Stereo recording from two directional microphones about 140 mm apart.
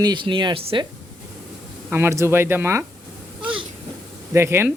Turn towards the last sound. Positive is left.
turn(degrees=-20)  # may be behind; listen again after turning